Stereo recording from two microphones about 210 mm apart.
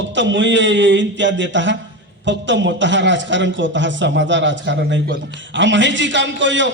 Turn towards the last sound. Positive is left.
turn(degrees=-60)  # may be behind; listen again after turning